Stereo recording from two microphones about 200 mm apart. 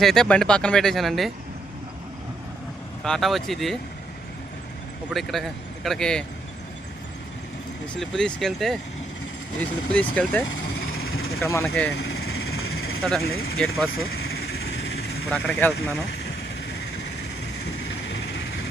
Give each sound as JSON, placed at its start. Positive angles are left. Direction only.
{"t": 0.0, "sound": "speech", "side_deg": 0}
{"t": 3.0, "sound": "speech", "side_deg": 0}
{"t": 5.1, "sound": "a man's voice", "side_deg": 0}
{"t": 7.9, "sound": "speech", "side_deg": 5}
{"t": 11.9, "sound": "vehicle", "side_deg": 55}
{"t": 13.2, "sound": "speech", "side_deg": 50}
{"t": 13.9, "sound": "vehicle", "side_deg": 55}
{"t": 15.3, "sound": "speech", "side_deg": 5}